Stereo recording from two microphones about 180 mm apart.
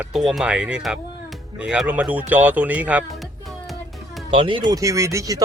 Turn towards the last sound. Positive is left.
turn(degrees=-15)  # may be behind; listen again after turning